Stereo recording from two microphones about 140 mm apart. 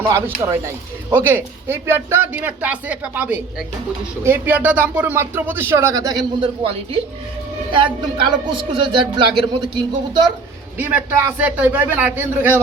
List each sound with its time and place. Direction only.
0.0 s speech: 15° right (ahead or behind); by 7.0 s 40° right (ahead or behind)
8.2 s a man's voice: 35° right (ahead or behind)
10.8 s speech: 15° right (ahead or behind)